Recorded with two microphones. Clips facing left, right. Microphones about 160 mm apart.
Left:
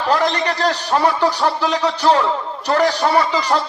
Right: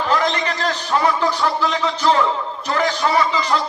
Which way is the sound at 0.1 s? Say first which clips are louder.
Left 4 dB; 35° left (ahead or behind).